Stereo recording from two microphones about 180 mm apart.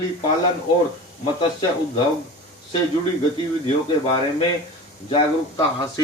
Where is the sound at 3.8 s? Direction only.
25° left (ahead or behind).